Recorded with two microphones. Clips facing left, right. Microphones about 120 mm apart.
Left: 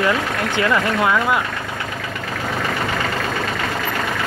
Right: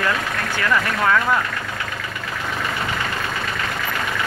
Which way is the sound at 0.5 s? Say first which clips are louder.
Left 3 dB; 15° left (ahead or behind).